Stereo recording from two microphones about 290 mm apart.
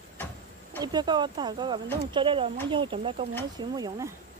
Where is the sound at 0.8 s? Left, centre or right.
Centre.